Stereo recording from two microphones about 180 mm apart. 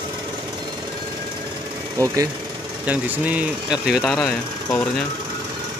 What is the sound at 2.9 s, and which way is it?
Speech, 10° right (ahead or behind).